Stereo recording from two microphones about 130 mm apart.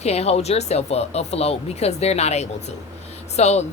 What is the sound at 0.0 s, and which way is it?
Speech, 55° left (ahead or behind).